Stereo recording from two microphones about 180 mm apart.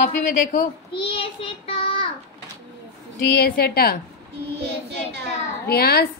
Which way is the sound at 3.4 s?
60° left (ahead or behind).